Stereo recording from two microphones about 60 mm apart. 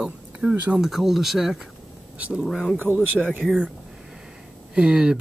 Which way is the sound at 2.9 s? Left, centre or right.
Right.